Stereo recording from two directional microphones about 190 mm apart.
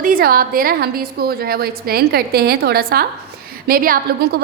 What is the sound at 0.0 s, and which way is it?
A woman's voice, 50° right (ahead or behind).